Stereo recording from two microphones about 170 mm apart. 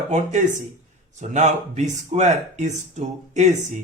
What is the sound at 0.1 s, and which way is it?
Speech, 45° right (ahead or behind).